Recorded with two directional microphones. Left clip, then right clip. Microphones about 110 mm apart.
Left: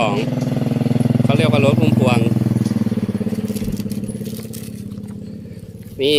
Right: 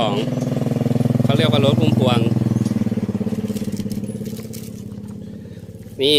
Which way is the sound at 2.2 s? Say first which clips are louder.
Left 1 dB; 35° left (ahead or behind).